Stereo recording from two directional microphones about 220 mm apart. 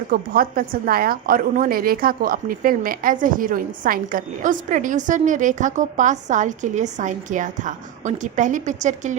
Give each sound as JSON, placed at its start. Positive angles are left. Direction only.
{"t": 0.1, "sound": "a woman's voice", "side_deg": -40}